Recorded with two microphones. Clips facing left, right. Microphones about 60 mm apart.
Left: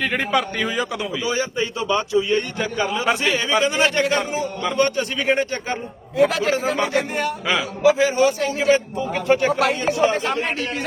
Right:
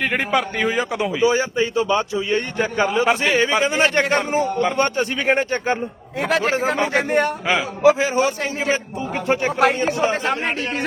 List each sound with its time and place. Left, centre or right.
0.0 s a man's voice: centre; by 7.3 s right
7.4 s a man's voice: right